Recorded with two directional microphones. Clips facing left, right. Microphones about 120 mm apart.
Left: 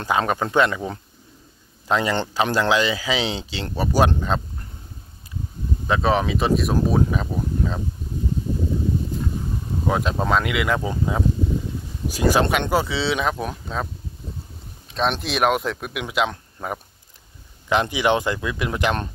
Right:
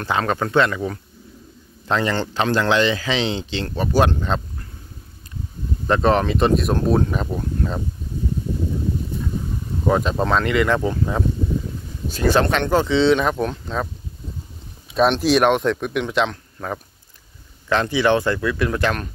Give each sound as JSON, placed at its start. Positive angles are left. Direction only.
{"t": 0.0, "sound": "speech", "side_deg": 15}
{"t": 5.9, "sound": "speech", "side_deg": 0}
{"t": 9.8, "sound": "speech", "side_deg": 0}
{"t": 15.0, "sound": "speech", "side_deg": 0}